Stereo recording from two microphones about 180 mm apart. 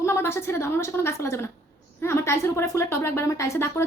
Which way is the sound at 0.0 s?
15° left (ahead or behind).